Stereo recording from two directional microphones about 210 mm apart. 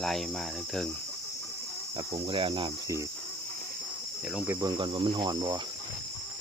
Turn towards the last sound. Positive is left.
turn(degrees=-20)  # may be behind; listen again after turning